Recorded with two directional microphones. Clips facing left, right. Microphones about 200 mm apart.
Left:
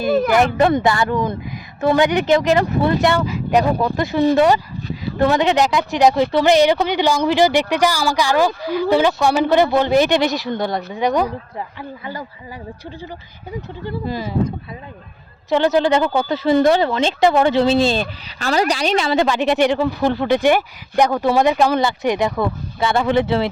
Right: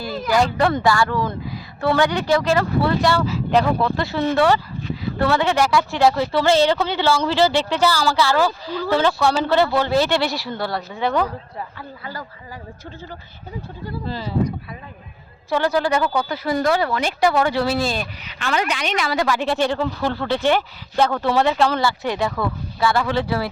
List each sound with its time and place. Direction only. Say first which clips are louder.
0.1 s speech: left 9 dB; 60° left (ahead or behind)
0.3 s a woman's voice: left 3 dB; 20° left (ahead or behind)
14.0 s a woman's voice: left 3 dB; 15° left (ahead or behind)
15.4 s speech: left 4 dB; 20° left (ahead or behind)